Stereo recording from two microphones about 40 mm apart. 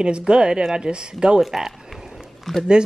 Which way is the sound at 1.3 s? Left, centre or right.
Centre.